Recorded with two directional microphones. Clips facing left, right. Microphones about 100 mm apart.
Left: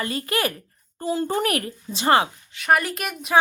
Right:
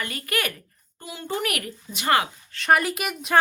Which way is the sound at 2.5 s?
5° left (ahead or behind).